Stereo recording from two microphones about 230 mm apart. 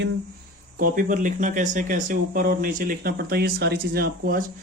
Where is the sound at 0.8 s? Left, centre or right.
Right.